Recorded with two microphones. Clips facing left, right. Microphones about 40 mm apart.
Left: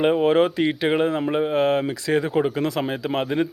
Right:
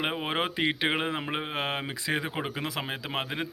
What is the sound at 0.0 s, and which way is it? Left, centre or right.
Speech, centre.